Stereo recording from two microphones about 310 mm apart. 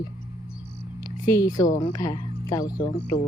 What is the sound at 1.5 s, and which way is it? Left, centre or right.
Speech, centre.